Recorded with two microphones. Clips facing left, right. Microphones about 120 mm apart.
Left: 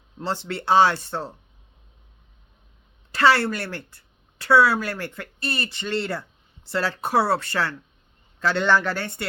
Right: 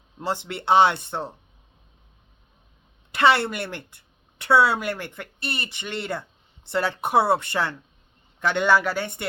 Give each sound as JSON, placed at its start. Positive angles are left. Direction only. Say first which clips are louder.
{"t": 0.2, "sound": "a woman's voice", "louder": "even", "side_deg": -15}
{"t": 3.1, "sound": "a woman's voice", "louder": "even", "side_deg": -20}